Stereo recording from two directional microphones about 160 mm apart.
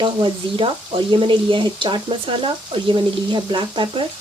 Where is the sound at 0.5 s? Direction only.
30° right (ahead or behind).